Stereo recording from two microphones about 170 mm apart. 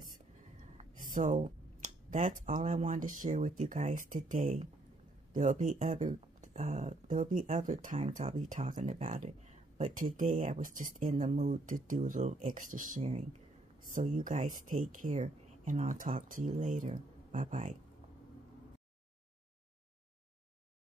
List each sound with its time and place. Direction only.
1.1 s speech: 50° right (ahead or behind)